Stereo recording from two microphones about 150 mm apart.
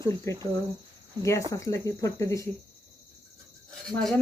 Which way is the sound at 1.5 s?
20° left (ahead or behind).